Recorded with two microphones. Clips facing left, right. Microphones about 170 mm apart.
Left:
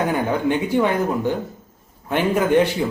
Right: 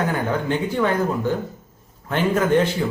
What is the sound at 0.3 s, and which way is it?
A man's voice, 15° left (ahead or behind).